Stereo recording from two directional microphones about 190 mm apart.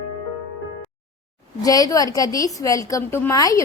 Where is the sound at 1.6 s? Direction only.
20° left (ahead or behind).